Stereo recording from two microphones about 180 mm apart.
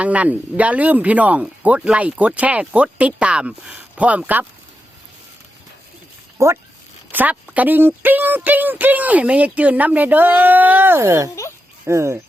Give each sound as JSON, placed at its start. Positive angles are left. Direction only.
{"t": 0.0, "sound": "speech", "side_deg": -10}
{"t": 6.3, "sound": "speech", "side_deg": -15}